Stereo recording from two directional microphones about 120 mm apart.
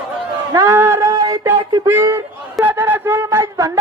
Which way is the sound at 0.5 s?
25° right (ahead or behind).